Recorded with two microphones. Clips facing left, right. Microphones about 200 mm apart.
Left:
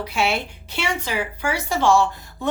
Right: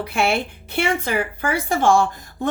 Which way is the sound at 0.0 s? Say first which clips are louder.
Right 2 dB; 55° right (ahead or behind).